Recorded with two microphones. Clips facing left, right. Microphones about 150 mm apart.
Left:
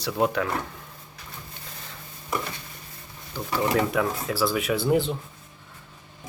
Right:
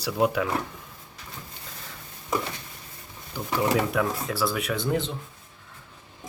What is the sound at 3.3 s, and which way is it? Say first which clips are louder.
Speech: left 1 dB; 10° right (ahead or behind).